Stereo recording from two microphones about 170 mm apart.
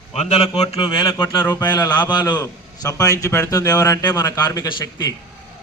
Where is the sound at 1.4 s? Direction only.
15° left (ahead or behind).